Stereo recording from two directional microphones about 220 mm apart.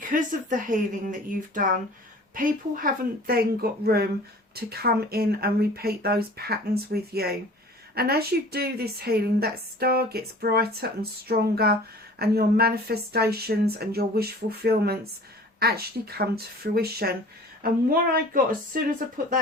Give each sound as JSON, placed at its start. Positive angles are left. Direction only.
{"t": 0.1, "sound": "a woman's voice", "side_deg": -35}